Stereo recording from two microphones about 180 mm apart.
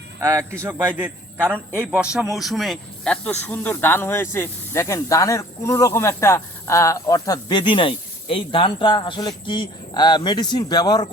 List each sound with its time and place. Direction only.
0.2 s a man's voice: 15° right (ahead or behind); by 11.1 s 20° left (ahead or behind)